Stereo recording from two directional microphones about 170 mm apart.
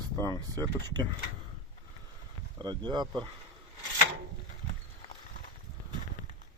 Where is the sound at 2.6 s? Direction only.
25° right (ahead or behind).